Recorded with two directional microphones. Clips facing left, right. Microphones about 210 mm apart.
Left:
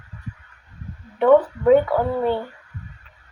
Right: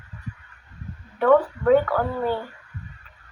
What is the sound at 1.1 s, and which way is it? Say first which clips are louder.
Speech: left 3 dB; 25° left (ahead or behind).